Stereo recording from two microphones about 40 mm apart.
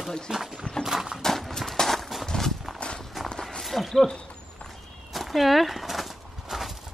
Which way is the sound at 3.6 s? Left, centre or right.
Centre.